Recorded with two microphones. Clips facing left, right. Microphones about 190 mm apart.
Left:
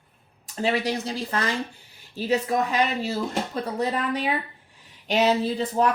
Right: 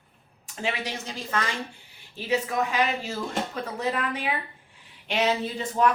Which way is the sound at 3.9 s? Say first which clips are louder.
Left 3 dB; 35° left (ahead or behind).